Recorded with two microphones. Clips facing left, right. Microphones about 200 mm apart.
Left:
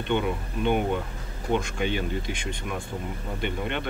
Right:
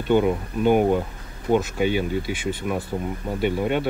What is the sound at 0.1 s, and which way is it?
Speech, 45° right (ahead or behind).